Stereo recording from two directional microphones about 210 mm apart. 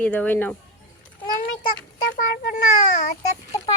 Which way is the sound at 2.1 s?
40° left (ahead or behind).